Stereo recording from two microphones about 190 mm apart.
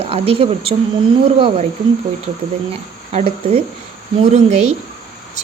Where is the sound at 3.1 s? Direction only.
35° right (ahead or behind).